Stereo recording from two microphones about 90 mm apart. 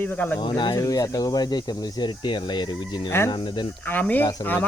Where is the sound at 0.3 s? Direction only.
55° left (ahead or behind).